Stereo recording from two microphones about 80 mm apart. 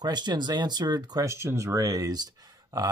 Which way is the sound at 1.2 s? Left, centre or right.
Right.